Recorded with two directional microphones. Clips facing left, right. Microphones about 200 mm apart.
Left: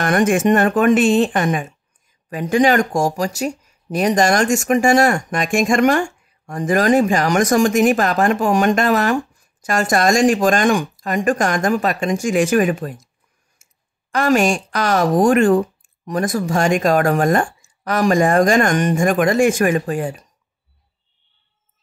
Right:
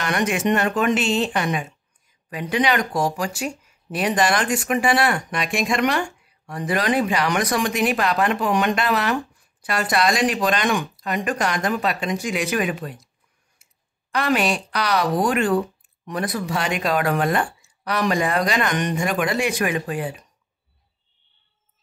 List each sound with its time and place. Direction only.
0.0 s speech: 50° left (ahead or behind)
13.6 s clicking: 45° left (ahead or behind)
14.1 s speech: 45° left (ahead or behind)